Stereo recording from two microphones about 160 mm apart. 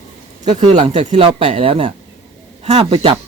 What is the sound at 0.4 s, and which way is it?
Speech, 45° right (ahead or behind).